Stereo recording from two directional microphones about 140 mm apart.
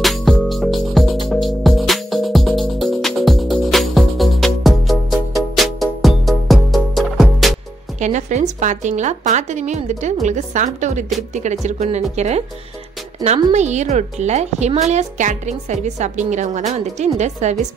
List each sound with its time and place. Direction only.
0.0 s music: centre (ahead or behind)
8.0 s a woman's voice: 60° right (ahead or behind)
13.5 s a woman's voice: 55° right (ahead or behind)